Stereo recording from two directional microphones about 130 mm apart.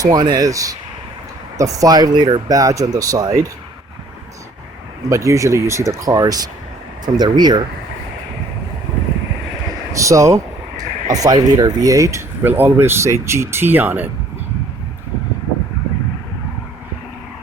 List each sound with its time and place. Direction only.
0.0 s speech: 30° right (ahead or behind)
5.0 s speech: 25° right (ahead or behind)
9.9 s a sound: 25° right (ahead or behind)
11.1 s speech: 30° right (ahead or behind)